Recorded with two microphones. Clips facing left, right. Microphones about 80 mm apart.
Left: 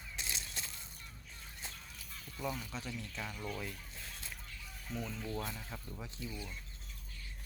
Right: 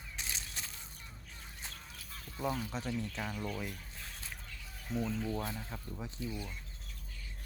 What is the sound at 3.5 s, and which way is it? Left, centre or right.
Speech, centre.